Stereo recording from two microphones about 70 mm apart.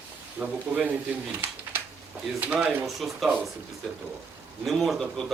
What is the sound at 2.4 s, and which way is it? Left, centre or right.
Speech, centre.